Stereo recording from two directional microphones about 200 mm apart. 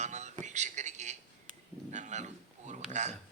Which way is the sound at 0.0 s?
35° right (ahead or behind).